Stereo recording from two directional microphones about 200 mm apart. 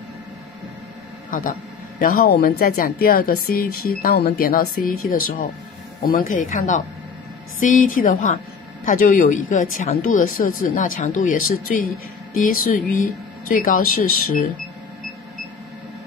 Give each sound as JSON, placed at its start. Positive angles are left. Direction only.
{"t": 1.3, "sound": "a woman's voice", "side_deg": 45}